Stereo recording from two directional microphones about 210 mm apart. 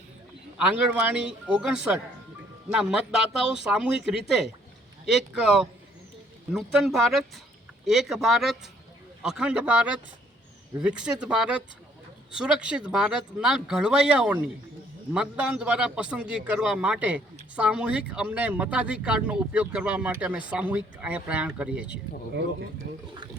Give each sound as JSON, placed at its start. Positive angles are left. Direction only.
{"t": 0.6, "sound": "speech", "side_deg": -5}